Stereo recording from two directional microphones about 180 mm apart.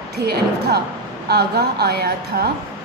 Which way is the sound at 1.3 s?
60° right (ahead or behind).